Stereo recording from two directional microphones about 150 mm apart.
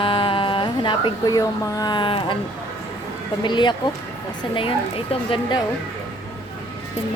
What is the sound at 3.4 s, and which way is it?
Speech, 30° left (ahead or behind).